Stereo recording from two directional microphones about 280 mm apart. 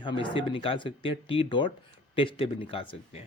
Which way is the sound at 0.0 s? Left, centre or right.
Centre.